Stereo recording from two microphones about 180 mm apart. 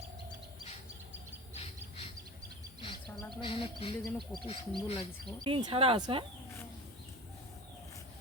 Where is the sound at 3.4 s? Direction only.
30° left (ahead or behind).